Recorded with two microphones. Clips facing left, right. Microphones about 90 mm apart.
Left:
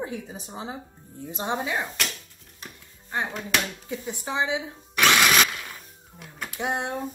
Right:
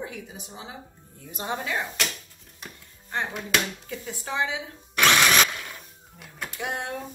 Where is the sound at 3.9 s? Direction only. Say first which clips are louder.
Left 4 dB; 20° left (ahead or behind).